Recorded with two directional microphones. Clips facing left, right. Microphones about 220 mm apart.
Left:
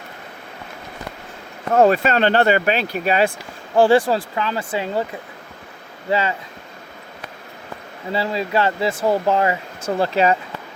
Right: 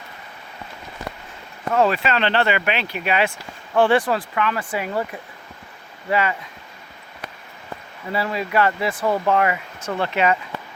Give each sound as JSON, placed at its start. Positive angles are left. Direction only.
{"t": 1.7, "sound": "speech", "side_deg": 45}
{"t": 3.8, "sound": "speech", "side_deg": 30}
{"t": 8.1, "sound": "speech", "side_deg": 25}